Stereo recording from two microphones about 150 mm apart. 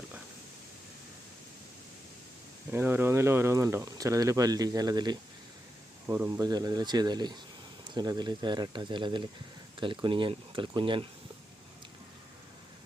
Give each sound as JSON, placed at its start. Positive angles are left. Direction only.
{"t": 2.7, "sound": "speech", "side_deg": -15}
{"t": 6.1, "sound": "speech", "side_deg": -15}